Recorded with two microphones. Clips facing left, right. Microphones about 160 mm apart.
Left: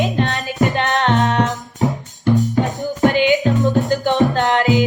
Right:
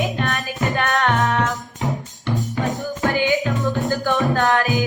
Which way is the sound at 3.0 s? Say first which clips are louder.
Left 6 dB; 20° left (ahead or behind).